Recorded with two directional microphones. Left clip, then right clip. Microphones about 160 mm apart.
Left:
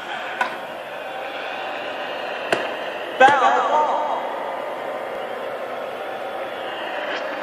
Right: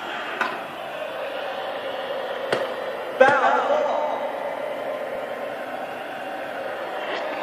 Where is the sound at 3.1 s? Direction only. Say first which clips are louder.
Left 3 dB; 40° left (ahead or behind).